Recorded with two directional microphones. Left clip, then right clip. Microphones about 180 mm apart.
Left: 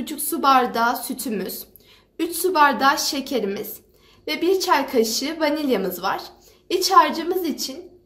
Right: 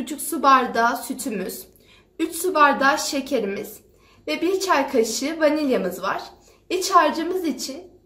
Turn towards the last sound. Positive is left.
turn(degrees=40)  # may be behind; listen again after turning